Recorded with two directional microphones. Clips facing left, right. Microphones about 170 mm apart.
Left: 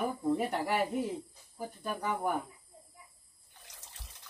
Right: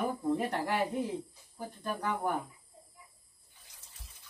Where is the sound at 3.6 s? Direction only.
80° left.